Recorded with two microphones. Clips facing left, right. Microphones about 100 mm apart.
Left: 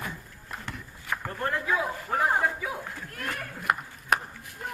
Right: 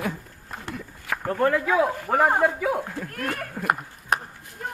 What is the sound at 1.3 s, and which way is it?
Speech, 80° right.